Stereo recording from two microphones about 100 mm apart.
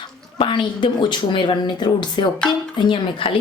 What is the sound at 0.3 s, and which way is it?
A woman's voice, 55° left (ahead or behind).